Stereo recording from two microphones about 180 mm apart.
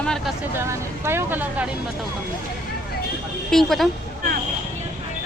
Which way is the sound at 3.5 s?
Centre (ahead or behind).